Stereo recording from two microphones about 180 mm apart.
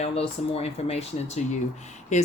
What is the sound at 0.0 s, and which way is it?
Speech, 35° left (ahead or behind).